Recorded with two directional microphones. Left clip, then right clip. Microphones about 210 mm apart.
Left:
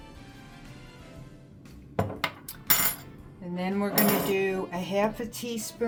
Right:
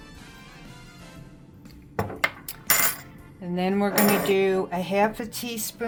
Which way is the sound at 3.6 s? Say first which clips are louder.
Right 5 dB; 20° right (ahead or behind).